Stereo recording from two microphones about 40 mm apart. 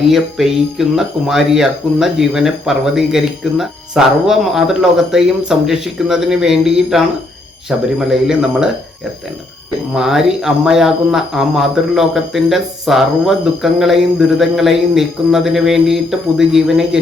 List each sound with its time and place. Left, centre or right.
0.1 s speech: centre
9.9 s speech: centre